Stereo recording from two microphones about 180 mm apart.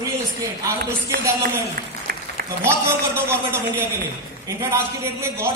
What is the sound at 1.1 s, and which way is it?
Speech, 65° right (ahead or behind).